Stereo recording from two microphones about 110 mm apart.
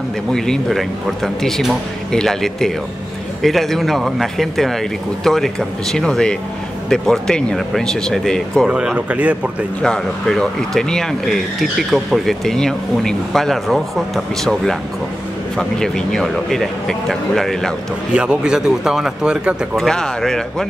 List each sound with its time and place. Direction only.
0.3 s speech: 5° left (ahead or behind)
8.6 s speech: 10° right (ahead or behind)
9.8 s speech: 5° left (ahead or behind)
18.1 s speech: 10° right (ahead or behind)